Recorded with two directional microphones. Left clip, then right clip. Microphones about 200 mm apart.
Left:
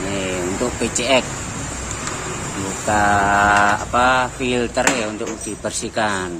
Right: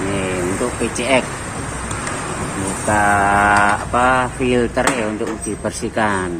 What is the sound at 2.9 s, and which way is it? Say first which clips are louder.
Speech: right 1 dB; 10° left (ahead or behind).